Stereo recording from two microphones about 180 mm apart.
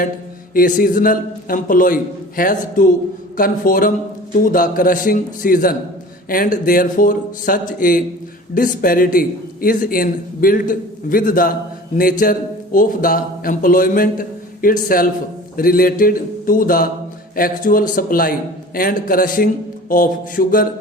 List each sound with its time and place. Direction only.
0.5 s a man's voice: 50° left (ahead or behind)